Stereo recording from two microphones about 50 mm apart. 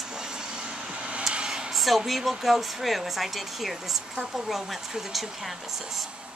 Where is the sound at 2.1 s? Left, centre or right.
Centre.